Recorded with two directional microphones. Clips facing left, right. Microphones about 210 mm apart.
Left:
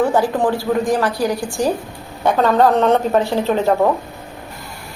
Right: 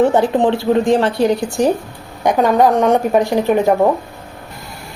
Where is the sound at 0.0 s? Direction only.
20° right (ahead or behind).